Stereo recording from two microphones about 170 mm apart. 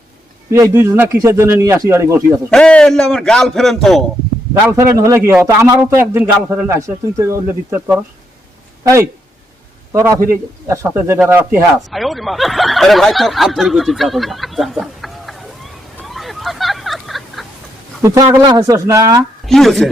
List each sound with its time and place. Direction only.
0.5 s a man's voice: 20° right (ahead or behind)
2.5 s speech: 5° left (ahead or behind)
4.5 s a man's voice: 20° right (ahead or behind)
11.9 s speech: centre (ahead or behind)
16.0 s a sound: centre (ahead or behind)
18.0 s speech: 20° right (ahead or behind)
19.5 s speech: centre (ahead or behind)